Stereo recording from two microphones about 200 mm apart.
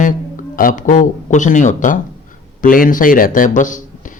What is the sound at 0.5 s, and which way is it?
A man's voice, 40° left (ahead or behind).